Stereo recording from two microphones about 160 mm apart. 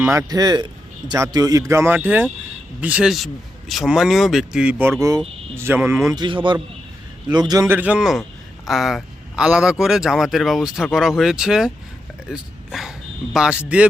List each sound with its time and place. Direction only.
0.0 s a man's voice: 20° right (ahead or behind)